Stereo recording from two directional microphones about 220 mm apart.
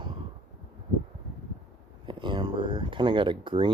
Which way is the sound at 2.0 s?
20° right (ahead or behind).